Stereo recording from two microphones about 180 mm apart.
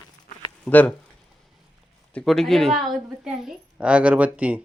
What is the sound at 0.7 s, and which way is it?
Speech, 10° left (ahead or behind).